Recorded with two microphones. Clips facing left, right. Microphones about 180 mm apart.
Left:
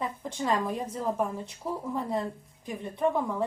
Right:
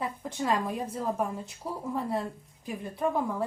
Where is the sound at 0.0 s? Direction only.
5° right (ahead or behind).